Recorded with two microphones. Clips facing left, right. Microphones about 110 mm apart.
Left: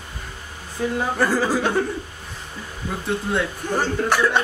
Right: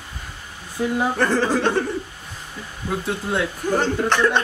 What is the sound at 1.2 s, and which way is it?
Speech, 10° left (ahead or behind).